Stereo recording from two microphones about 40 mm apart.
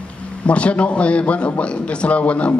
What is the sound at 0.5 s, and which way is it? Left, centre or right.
A man's voice, left.